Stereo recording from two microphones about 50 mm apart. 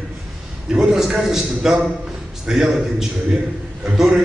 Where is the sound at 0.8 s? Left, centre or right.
Centre.